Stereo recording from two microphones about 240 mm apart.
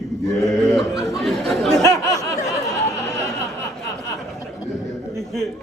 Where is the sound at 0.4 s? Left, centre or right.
Centre.